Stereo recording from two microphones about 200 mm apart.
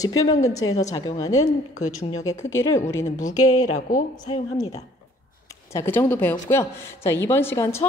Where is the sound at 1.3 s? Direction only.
90° left.